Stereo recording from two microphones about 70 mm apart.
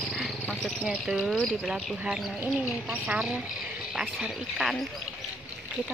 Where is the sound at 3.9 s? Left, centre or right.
Centre.